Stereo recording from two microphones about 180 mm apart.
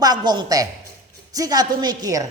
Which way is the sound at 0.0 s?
20° right (ahead or behind).